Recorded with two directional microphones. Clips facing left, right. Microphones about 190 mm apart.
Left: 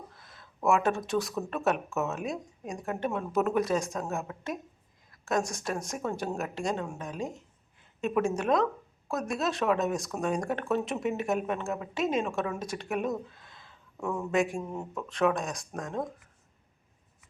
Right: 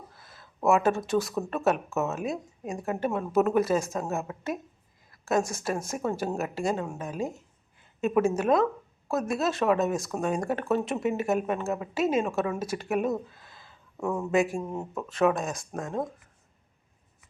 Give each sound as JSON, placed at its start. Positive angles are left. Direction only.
{"t": 0.1, "sound": "speech", "side_deg": -5}
{"t": 14.6, "sound": "speech", "side_deg": -15}
{"t": 14.9, "sound": "speech", "side_deg": -5}